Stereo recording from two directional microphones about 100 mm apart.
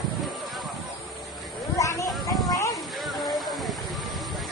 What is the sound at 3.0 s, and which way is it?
Hiss, centre (ahead or behind).